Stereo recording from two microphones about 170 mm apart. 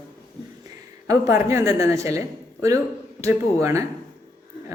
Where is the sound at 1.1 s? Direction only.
20° right (ahead or behind).